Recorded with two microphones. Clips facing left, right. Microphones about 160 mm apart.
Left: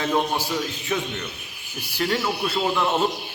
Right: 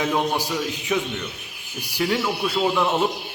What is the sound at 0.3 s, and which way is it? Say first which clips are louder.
A man's voice: right 1 dB; 15° right (ahead or behind).